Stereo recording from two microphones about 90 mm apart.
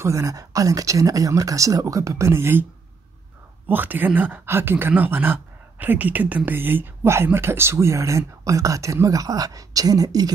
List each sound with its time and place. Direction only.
0.0 s speech: 35° right (ahead or behind)
3.6 s speech: 20° right (ahead or behind); by 10.3 s 45° right (ahead or behind)